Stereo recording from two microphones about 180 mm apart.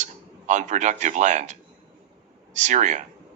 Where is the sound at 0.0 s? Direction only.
40° right (ahead or behind).